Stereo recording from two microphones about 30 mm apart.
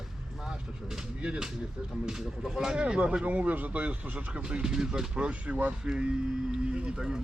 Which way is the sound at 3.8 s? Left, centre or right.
Right.